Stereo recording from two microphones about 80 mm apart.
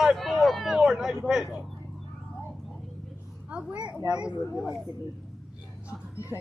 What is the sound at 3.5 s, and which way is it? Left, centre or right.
Speech, centre.